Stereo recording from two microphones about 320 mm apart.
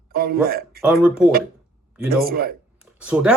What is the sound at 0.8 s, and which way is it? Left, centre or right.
Speech, centre.